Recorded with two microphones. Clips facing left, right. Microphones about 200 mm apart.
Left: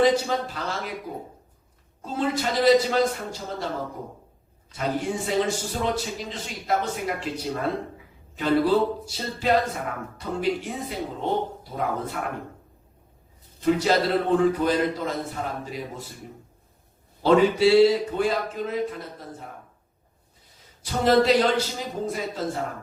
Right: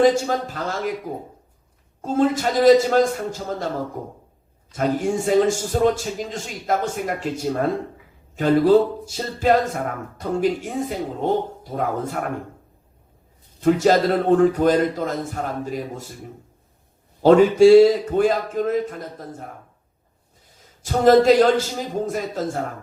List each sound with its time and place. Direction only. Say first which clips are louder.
0.0 s speech: right 3 dB; 45° right (ahead or behind)
2.0 s speech: right 7 dB; 45° right (ahead or behind)
4.7 s speech: right 6 dB; 45° right (ahead or behind)
13.6 s speech: right 5 dB; 50° right (ahead or behind)
17.2 s speech: right 6 dB; 45° right (ahead or behind)
20.8 s speech: right 6 dB; 45° right (ahead or behind)